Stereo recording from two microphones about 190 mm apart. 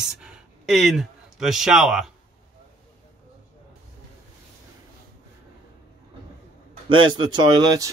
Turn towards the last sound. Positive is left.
turn(degrees=-20)  # may be behind; listen again after turning